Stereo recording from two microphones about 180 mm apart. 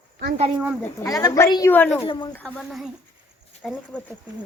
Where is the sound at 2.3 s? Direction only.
5° left (ahead or behind).